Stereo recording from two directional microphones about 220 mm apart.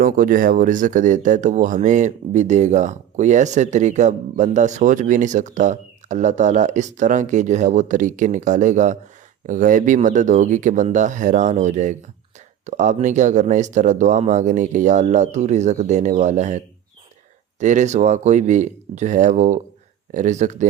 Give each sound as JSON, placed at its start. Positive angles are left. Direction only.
{"t": 0.0, "sound": "speech", "side_deg": -40}
{"t": 17.6, "sound": "speech", "side_deg": -35}